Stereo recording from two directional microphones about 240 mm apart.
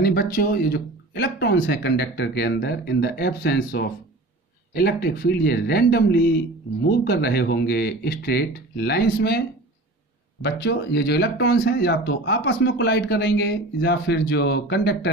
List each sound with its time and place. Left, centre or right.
0.0 s speech: left
10.4 s speech: left